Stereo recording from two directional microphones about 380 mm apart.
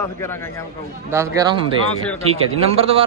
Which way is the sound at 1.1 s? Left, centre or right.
Centre.